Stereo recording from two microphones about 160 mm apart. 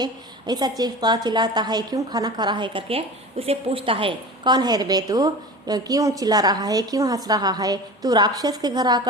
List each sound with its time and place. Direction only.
0.0 s a woman's voice: 25° right (ahead or behind)